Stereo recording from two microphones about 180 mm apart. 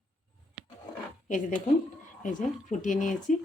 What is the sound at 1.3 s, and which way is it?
Speech, 45° left (ahead or behind).